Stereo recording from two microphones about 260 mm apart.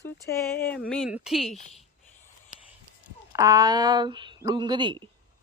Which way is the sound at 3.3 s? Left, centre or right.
Centre.